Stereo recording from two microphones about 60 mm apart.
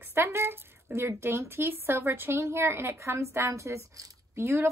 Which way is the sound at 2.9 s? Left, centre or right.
Right.